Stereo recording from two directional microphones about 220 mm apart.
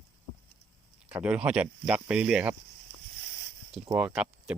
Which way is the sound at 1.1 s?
5° right (ahead or behind).